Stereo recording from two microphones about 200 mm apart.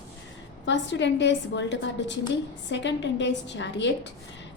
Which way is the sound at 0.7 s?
65° left (ahead or behind).